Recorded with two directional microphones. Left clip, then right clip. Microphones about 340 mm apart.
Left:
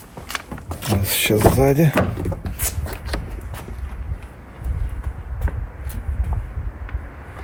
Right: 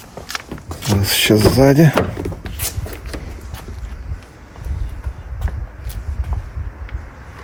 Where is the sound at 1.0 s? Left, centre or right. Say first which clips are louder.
Right 3 dB; right.